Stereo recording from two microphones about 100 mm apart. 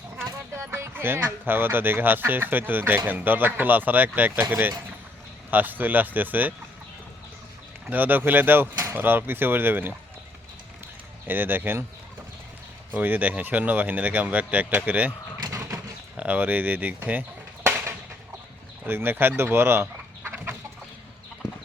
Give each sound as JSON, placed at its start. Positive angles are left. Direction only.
{"t": 0.5, "sound": "speech", "side_deg": -25}
{"t": 5.5, "sound": "speech", "side_deg": -20}
{"t": 7.9, "sound": "speech", "side_deg": -20}
{"t": 11.3, "sound": "speech", "side_deg": -20}
{"t": 12.9, "sound": "speech", "side_deg": -15}
{"t": 15.4, "sound": "a sound", "side_deg": -35}
{"t": 16.1, "sound": "speech", "side_deg": -15}
{"t": 18.9, "sound": "speech", "side_deg": -20}